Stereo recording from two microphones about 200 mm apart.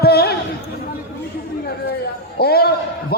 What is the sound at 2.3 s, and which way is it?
Basketball bounce, 50° left (ahead or behind).